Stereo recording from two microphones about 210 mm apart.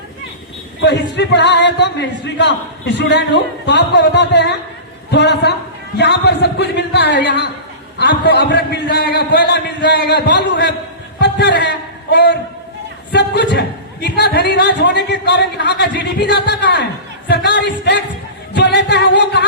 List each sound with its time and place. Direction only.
1.1 s a man's voice: 55° left (ahead or behind)